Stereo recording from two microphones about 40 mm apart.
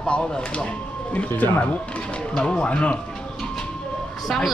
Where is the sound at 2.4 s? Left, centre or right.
Left.